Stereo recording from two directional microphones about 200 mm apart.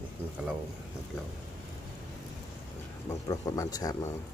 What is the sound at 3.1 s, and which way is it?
Speech, 15° left (ahead or behind).